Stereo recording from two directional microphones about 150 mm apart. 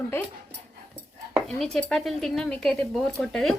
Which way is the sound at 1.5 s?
5° left (ahead or behind).